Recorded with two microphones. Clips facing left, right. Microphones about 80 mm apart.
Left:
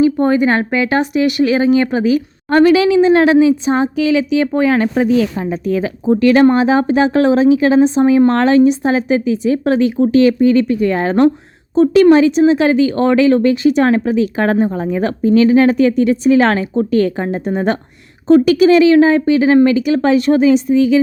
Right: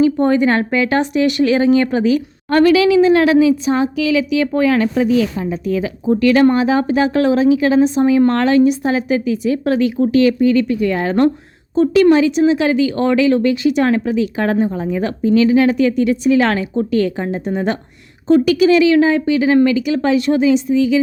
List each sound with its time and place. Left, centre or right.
0.0 s speech: centre
2.5 s speech: left